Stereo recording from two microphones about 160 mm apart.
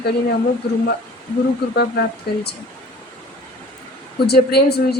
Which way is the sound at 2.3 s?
75° left (ahead or behind).